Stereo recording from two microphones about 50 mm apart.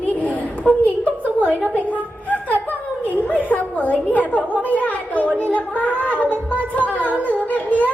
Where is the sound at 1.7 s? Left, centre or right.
Left.